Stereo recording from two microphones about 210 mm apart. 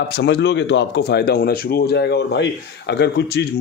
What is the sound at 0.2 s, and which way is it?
A man's voice, 55° left (ahead or behind).